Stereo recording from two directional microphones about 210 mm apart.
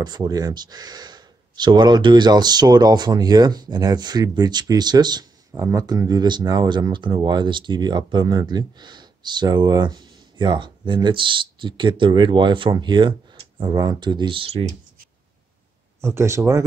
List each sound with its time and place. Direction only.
0.0 s speech: 20° right (ahead or behind)
16.0 s speech: 10° right (ahead or behind)